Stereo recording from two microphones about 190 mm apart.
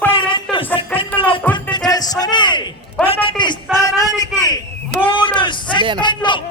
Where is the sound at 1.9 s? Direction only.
20° left (ahead or behind).